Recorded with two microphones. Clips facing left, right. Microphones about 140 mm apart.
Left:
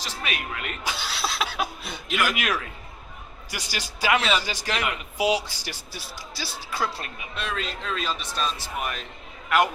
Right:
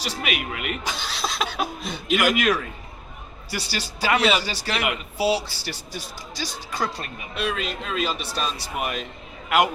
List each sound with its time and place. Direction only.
0.0 s speech: 15° right (ahead or behind)
0.9 s speech: 10° left (ahead or behind)
2.0 s speech: 15° right (ahead or behind)
2.3 s speech: 10° left (ahead or behind)
4.2 s speech: 10° right (ahead or behind)
5.1 s speech: 15° left (ahead or behind)
7.3 s speech: 10° right (ahead or behind)